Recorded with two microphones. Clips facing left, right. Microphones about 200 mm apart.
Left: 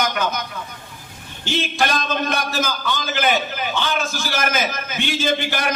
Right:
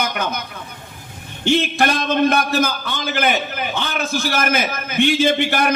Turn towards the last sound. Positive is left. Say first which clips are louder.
# right 4 dB
turn(degrees=-60)  # may be behind; listen again after turning